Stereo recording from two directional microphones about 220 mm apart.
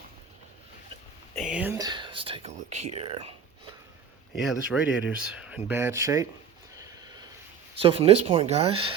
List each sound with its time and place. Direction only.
1.4 s speech: 5° right (ahead or behind); by 3.3 s 25° right (ahead or behind)
4.7 s speech: 5° right (ahead or behind)
6.7 s a sound: 20° right (ahead or behind)
7.8 s speech: 25° right (ahead or behind)